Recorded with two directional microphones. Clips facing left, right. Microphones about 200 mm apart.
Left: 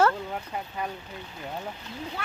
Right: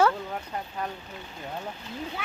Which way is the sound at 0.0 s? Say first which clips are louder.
Even; 5° left (ahead or behind).